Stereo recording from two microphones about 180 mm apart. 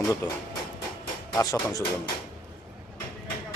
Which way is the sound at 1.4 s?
15° left (ahead or behind).